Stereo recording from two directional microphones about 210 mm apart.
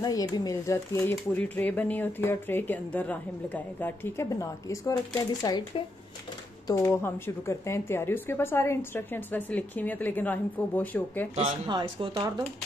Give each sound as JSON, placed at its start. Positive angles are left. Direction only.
{"t": 0.0, "sound": "speech", "side_deg": 15}
{"t": 11.3, "sound": "speech", "side_deg": -25}